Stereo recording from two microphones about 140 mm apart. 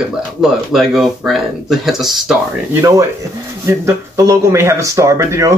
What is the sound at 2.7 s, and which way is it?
Speech, 20° right (ahead or behind).